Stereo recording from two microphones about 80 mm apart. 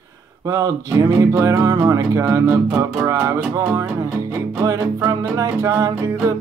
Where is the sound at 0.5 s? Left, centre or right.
Right.